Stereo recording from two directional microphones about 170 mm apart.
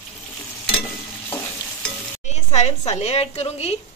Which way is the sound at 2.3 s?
40° left (ahead or behind).